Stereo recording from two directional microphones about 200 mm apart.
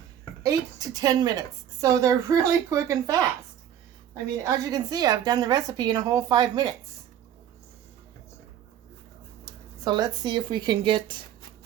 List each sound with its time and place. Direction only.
0.4 s a woman's voice: 20° right (ahead or behind)
9.8 s a woman's voice: 20° right (ahead or behind)